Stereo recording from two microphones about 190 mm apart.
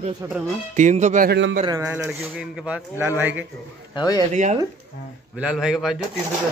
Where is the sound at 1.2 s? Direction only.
65° right (ahead or behind).